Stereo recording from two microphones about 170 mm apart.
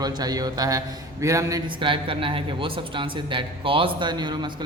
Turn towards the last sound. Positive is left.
turn(degrees=-25)  # may be behind; listen again after turning